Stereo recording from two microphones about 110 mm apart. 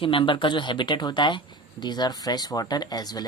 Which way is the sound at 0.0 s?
55° left (ahead or behind).